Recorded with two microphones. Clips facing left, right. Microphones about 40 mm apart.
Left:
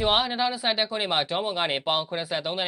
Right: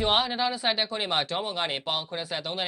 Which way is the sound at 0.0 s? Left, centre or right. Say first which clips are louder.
Left 1 dB; centre.